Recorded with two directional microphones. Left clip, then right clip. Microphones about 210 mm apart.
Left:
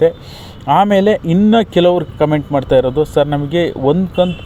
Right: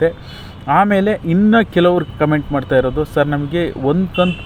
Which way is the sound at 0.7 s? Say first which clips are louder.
Left 3 dB; 25° left (ahead or behind).